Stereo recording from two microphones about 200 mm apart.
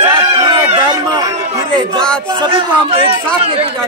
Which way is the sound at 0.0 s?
20° right (ahead or behind).